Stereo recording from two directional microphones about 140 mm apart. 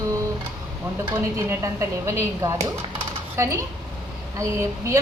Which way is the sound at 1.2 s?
20° right (ahead or behind).